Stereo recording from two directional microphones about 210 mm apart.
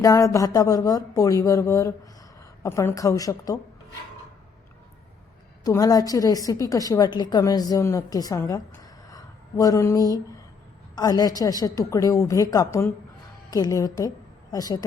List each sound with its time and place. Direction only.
0.0 s a woman's voice: 15° left (ahead or behind)
5.6 s a woman's voice: 15° left (ahead or behind)